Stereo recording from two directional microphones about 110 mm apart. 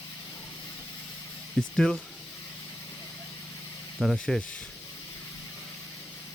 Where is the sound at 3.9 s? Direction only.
5° left (ahead or behind).